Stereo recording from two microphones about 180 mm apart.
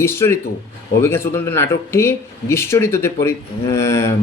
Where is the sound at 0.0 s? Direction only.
15° left (ahead or behind).